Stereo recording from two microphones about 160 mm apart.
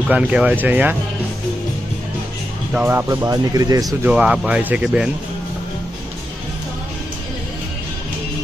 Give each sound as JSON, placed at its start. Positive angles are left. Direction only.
{"t": 0.1, "sound": "speech", "side_deg": -5}
{"t": 2.7, "sound": "speech", "side_deg": -10}
{"t": 4.0, "sound": "speech", "side_deg": -5}